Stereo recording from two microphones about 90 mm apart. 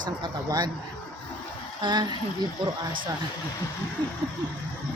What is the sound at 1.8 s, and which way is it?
Speech, 55° right (ahead or behind).